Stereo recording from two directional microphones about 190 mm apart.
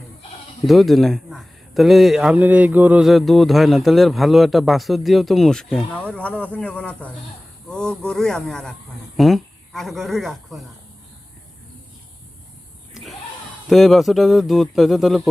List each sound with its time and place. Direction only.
0.6 s a man's voice: centre (ahead or behind)
12.9 s a sound: centre (ahead or behind)
13.7 s a man's voice: centre (ahead or behind)